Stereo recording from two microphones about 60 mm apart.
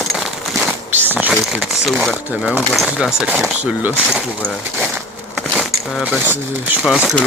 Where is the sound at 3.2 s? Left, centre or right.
Centre.